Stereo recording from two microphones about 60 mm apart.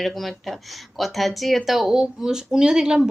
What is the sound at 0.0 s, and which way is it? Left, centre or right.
Speech, centre.